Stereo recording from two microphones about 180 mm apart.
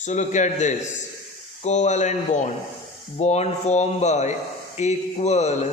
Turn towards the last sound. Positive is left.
turn(degrees=35)  # may be behind; listen again after turning